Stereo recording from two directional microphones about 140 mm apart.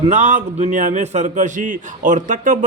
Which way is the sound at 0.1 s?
60° right (ahead or behind).